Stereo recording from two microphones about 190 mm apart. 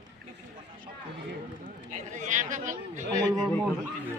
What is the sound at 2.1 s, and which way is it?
Speech, 40° right (ahead or behind).